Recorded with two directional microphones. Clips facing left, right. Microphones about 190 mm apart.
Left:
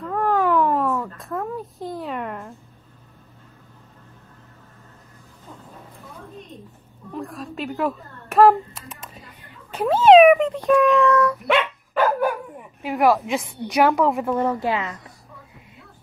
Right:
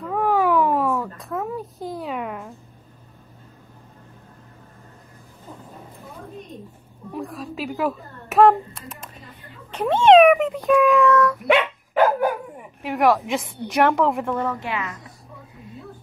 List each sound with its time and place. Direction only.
0.0 s a sound: 5° right (ahead or behind)
7.1 s a child's voice: centre (ahead or behind)
11.4 s dog: 15° right (ahead or behind)
12.8 s a child's voice: centre (ahead or behind)
14.4 s a woman's voice: 30° left (ahead or behind)